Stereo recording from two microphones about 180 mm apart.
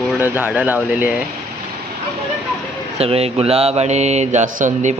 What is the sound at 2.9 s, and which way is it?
Mantra, 35° right (ahead or behind).